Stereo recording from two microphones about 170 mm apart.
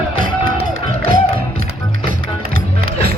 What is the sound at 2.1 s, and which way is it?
Music, 55° right (ahead or behind).